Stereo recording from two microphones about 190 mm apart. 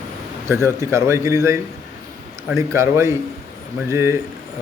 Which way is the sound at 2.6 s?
15° right (ahead or behind).